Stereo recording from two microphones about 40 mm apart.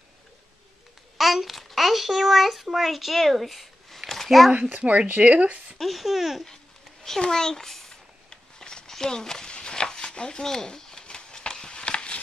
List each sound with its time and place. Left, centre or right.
1.1 s a child's voice: centre
5.0 s speech: right
5.8 s speech: centre
6.4 s a sound: centre